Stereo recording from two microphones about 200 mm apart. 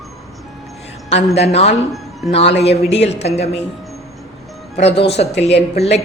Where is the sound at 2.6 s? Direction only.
30° left (ahead or behind).